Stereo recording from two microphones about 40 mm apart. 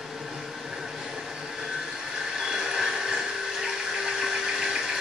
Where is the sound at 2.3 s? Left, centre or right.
Centre.